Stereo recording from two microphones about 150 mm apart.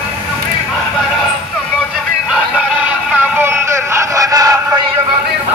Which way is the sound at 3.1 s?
15° right (ahead or behind).